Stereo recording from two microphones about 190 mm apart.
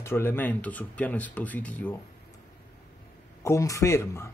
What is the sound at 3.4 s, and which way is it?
Speech, 15° left (ahead or behind).